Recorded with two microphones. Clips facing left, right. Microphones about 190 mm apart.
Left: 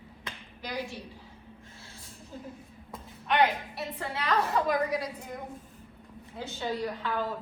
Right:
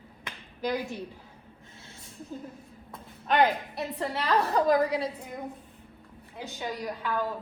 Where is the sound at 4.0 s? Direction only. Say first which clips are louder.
Right 2 dB; 30° right (ahead or behind).